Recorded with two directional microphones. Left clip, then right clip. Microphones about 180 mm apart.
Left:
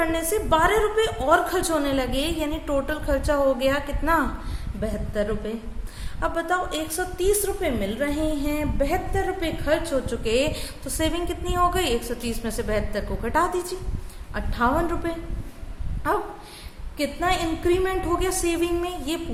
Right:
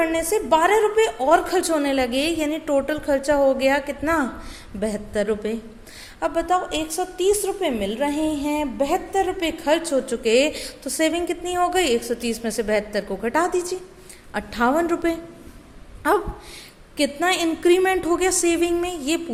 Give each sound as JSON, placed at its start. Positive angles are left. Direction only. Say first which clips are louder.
{"t": 0.0, "sound": "a woman's voice", "louder": "right 3 dB", "side_deg": -25}
{"t": 4.8, "sound": "a woman's voice", "louder": "right 3 dB", "side_deg": -40}
{"t": 6.1, "sound": "a woman's voice", "louder": "right 3 dB", "side_deg": -25}
{"t": 16.0, "sound": "a woman's voice", "louder": "right 5 dB", "side_deg": -40}